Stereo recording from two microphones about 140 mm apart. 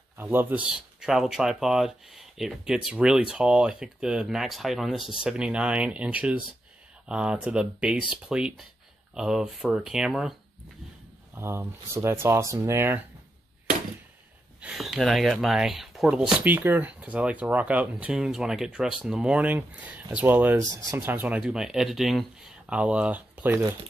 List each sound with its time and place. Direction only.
0.2 s speech: 15° right (ahead or behind)
11.3 s speech: 15° right (ahead or behind)
14.6 s speech: 5° right (ahead or behind)